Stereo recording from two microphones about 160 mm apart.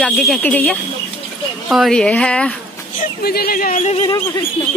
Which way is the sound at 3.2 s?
75° left (ahead or behind).